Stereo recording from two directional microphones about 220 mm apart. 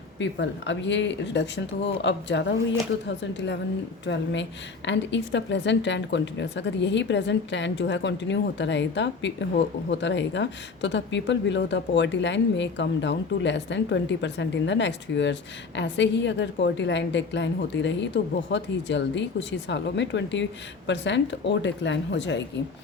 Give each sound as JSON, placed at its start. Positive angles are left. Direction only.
{"t": 0.2, "sound": "speech", "side_deg": 55}